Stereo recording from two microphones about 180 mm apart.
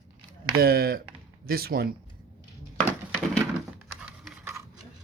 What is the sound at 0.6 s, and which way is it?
Speech, 55° right (ahead or behind).